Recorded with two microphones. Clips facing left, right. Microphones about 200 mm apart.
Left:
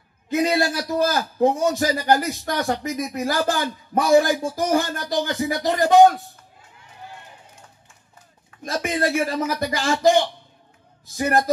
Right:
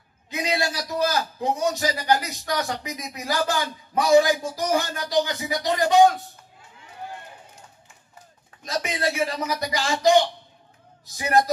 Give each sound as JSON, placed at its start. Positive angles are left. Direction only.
{"t": 0.3, "sound": "a man's voice", "side_deg": 50}
{"t": 8.6, "sound": "a man's voice", "side_deg": 50}
{"t": 11.1, "sound": "a man's voice", "side_deg": 50}